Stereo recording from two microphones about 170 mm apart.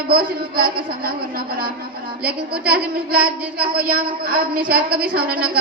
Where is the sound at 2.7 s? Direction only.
60° right (ahead or behind).